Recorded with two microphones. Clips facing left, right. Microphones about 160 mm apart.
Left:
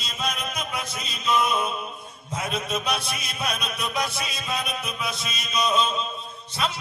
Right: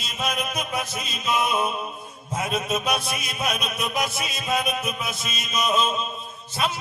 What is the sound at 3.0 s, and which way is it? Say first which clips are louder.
Music: right 2 dB; 25° right (ahead or behind).